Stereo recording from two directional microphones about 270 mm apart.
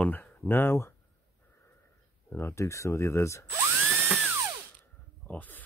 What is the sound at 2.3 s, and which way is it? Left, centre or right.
Speech, centre.